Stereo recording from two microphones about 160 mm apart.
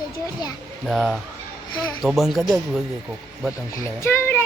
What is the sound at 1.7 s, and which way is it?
Speech, 25° left (ahead or behind).